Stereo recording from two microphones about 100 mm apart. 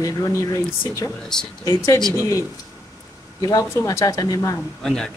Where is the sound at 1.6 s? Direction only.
40° left (ahead or behind).